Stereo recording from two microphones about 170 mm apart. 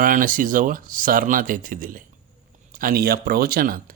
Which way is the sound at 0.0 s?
50° right (ahead or behind).